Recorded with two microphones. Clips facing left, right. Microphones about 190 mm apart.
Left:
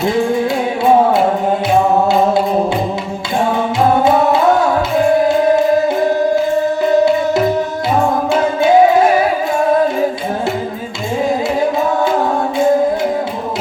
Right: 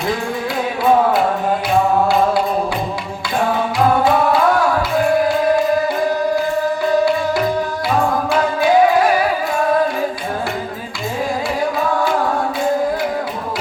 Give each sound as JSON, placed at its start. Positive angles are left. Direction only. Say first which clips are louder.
{"t": 4.0, "sound": "music", "louder": "left 3 dB", "side_deg": 25}
{"t": 8.3, "sound": "music", "louder": "left 4 dB", "side_deg": 25}